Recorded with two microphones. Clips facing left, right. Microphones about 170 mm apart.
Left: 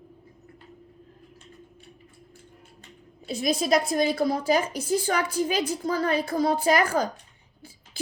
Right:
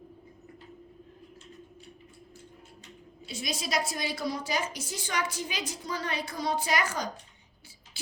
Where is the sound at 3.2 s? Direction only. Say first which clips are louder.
Left 10 dB; 50° left (ahead or behind).